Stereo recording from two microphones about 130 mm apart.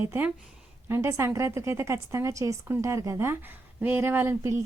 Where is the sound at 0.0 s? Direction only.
20° right (ahead or behind).